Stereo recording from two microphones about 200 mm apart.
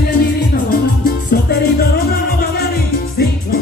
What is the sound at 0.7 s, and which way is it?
Music, 50° left (ahead or behind).